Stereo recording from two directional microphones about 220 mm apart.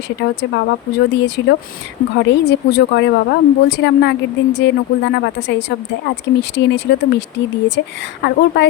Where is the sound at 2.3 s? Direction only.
50° left (ahead or behind).